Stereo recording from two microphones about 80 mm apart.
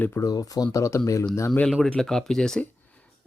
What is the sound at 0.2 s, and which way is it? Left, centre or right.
Speech, left.